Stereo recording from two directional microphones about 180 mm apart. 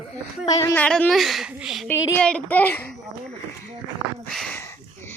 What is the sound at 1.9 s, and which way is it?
Speech, 15° left (ahead or behind).